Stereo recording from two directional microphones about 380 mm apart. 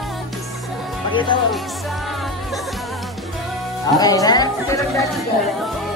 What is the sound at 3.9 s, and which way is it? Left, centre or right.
Speech, centre.